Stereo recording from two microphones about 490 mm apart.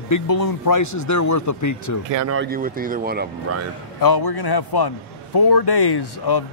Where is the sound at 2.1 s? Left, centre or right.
Right.